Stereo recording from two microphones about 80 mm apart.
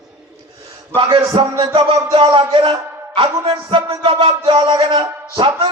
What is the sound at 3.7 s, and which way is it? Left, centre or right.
Speech, right.